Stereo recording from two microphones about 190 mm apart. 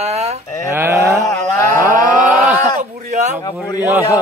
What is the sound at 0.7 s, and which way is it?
Speech, 15° right (ahead or behind).